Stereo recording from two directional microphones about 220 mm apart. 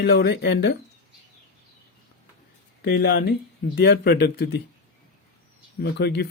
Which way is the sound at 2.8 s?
45° left (ahead or behind).